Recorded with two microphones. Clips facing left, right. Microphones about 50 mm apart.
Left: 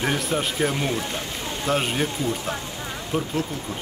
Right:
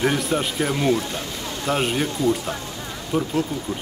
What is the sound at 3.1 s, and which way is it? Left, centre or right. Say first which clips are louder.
Speech: right 3 dB; left.